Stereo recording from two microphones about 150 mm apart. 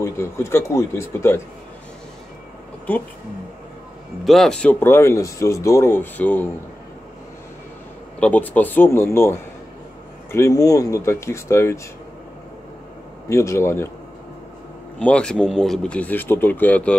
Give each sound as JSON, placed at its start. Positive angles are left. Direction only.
{"t": 0.0, "sound": "speech", "side_deg": 15}
{"t": 4.2, "sound": "speech", "side_deg": 0}
{"t": 8.2, "sound": "speech", "side_deg": 10}
{"t": 13.3, "sound": "speech", "side_deg": 20}
{"t": 15.0, "sound": "speech", "side_deg": 10}